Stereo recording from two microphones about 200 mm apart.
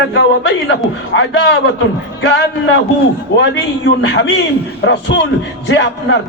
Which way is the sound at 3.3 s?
65° left (ahead or behind).